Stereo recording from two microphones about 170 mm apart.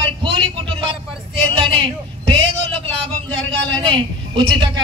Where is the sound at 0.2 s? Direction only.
30° right (ahead or behind).